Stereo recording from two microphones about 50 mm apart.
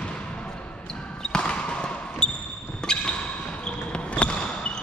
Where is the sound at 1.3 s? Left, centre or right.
Centre.